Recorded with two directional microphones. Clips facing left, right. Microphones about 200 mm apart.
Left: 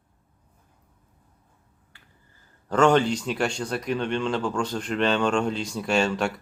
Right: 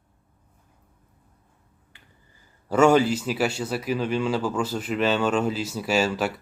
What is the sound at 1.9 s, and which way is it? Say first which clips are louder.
Finger snapping: right 1 dB; 20° right (ahead or behind).